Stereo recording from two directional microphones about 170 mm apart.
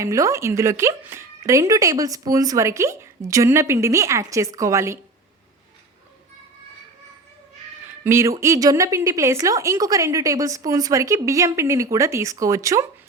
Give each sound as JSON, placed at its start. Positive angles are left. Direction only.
{"t": 0.0, "sound": "speech", "side_deg": -20}
{"t": 8.0, "sound": "a woman's voice", "side_deg": -15}